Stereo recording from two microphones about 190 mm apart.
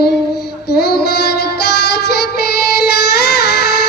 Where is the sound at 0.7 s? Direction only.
60° left (ahead or behind).